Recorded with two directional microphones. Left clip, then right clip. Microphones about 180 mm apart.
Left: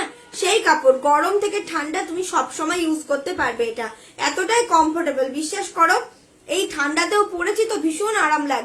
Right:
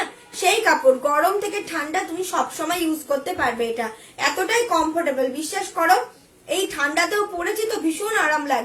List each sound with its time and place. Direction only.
0.3 s a woman's voice: 20° left (ahead or behind)